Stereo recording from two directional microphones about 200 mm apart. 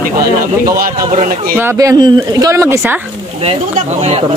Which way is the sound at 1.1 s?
40° right (ahead or behind).